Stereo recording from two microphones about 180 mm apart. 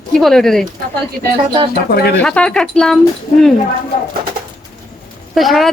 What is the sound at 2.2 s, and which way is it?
Speech, 5° left (ahead or behind).